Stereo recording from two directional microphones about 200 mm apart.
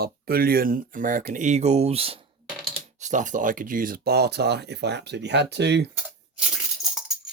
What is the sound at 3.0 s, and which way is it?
Speech, 40° right (ahead or behind).